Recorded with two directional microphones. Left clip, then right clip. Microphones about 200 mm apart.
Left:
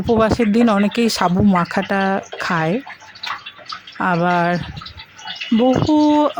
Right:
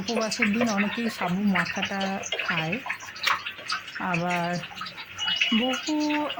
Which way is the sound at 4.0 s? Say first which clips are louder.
Left 12 dB; 50° left (ahead or behind).